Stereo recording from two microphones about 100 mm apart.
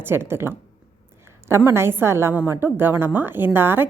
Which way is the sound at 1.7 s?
25° right (ahead or behind).